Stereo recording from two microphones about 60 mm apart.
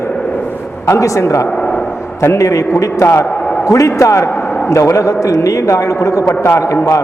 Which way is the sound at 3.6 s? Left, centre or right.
Left.